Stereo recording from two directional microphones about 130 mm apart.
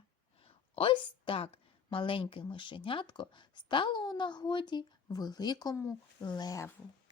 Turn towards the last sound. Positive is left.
turn(degrees=25)  # may be behind; listen again after turning